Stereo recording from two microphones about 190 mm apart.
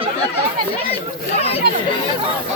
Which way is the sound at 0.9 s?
30° left (ahead or behind).